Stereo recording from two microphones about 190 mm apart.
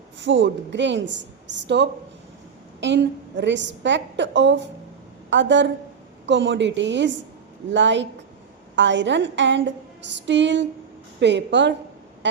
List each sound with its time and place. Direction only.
0.2 s a woman's voice: 70° right (ahead or behind)
12.2 s vehicle: 65° right (ahead or behind)